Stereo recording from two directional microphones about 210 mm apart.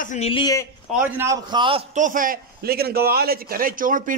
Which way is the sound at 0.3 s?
20° left (ahead or behind).